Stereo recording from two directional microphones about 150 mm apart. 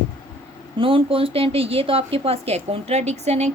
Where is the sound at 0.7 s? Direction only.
35° right (ahead or behind).